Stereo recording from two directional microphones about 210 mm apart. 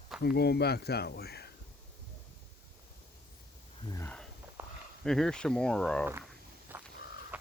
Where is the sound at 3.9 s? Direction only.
5° left (ahead or behind).